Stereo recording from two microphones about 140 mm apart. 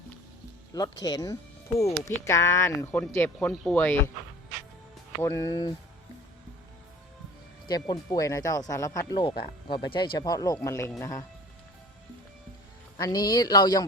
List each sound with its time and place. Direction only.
0.7 s speech: 25° left (ahead or behind); by 4.1 s 10° left (ahead or behind)
5.2 s speech: 20° left (ahead or behind)
7.7 s speech: 30° left (ahead or behind)
9.2 s speech: 35° left (ahead or behind)
13.0 s speech: 30° left (ahead or behind)